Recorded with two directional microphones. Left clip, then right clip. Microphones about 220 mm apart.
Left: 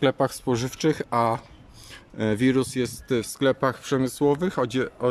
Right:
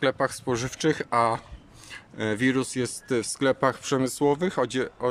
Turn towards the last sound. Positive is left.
turn(degrees=0)  # may be behind; listen again after turning